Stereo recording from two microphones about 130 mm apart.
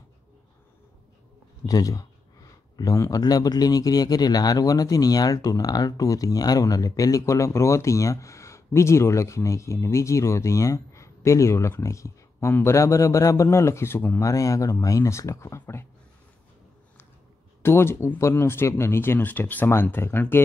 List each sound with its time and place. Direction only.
1.7 s speech: 30° left (ahead or behind)
17.6 s speech: 20° left (ahead or behind)